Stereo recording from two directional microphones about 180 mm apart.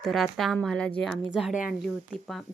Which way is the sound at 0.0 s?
Centre (ahead or behind).